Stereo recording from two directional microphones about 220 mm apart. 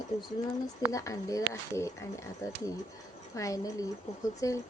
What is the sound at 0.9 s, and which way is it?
Speech, 15° left (ahead or behind).